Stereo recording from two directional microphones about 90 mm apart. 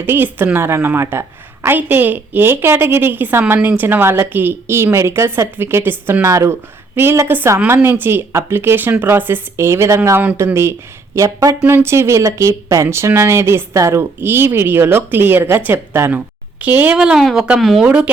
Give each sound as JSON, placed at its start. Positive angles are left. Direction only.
{"t": 0.0, "sound": "a woman's voice", "side_deg": -25}
{"t": 6.2, "sound": "a woman's voice", "side_deg": -35}
{"t": 16.9, "sound": "speech", "side_deg": -10}
{"t": 17.8, "sound": "speech", "side_deg": -15}